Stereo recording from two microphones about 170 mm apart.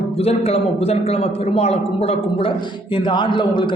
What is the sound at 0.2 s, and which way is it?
A man's voice, 35° left (ahead or behind).